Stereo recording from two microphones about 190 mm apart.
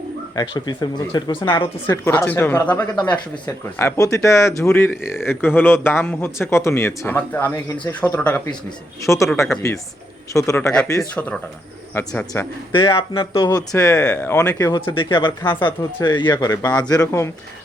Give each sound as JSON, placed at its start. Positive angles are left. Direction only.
{"t": 0.3, "sound": "speech", "side_deg": 20}
{"t": 2.0, "sound": "speech", "side_deg": 10}
{"t": 12.7, "sound": "speech", "side_deg": 25}